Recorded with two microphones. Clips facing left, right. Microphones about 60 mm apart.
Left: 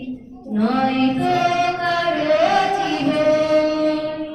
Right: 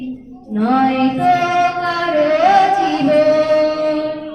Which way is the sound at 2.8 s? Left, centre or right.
Right.